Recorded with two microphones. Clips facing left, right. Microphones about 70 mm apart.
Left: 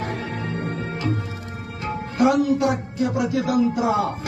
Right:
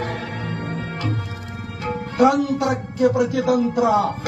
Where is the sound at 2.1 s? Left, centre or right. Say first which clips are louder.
Right 1 dB; right.